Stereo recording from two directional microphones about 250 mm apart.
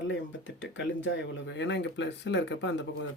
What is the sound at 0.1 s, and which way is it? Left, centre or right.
Speech, left.